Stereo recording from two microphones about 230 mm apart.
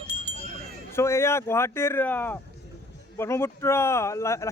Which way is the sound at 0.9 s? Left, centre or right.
Centre.